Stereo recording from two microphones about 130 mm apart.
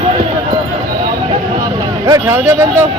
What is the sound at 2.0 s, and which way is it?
Speech, 20° right (ahead or behind).